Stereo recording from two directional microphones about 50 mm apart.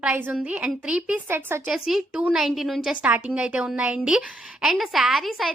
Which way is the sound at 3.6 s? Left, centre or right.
Right.